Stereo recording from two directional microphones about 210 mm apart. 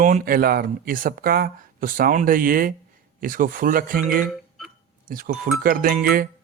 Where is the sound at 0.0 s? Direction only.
40° right (ahead or behind).